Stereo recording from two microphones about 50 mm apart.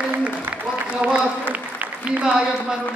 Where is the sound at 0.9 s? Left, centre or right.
Right.